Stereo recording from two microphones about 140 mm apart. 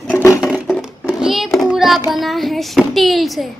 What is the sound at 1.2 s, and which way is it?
Child singing, centre (ahead or behind).